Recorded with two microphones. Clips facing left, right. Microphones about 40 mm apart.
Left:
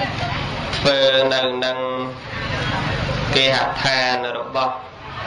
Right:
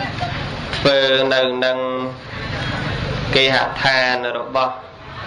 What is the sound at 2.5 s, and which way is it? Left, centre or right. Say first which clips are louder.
Vehicle: left 1 dB; left.